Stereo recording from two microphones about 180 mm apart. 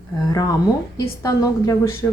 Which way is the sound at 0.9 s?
20° left (ahead or behind).